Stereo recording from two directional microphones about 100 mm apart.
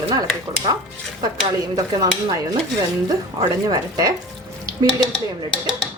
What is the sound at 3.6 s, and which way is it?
Speech, 40° right (ahead or behind).